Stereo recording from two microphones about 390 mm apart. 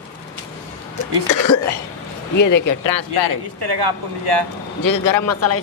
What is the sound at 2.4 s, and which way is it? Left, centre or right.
Speech, left.